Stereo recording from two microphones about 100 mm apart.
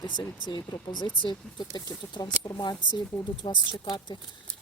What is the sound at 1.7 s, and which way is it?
Speech, 45° left (ahead or behind).